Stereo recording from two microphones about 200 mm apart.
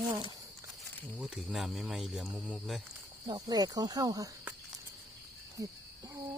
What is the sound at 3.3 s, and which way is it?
Cricket, 20° right (ahead or behind).